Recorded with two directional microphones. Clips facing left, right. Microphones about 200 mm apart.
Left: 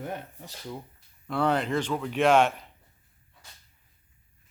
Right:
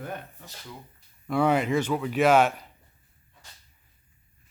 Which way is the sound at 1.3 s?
10° right (ahead or behind).